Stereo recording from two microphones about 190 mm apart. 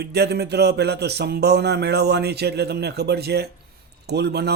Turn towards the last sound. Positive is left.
turn(degrees=-60)  # may be behind; listen again after turning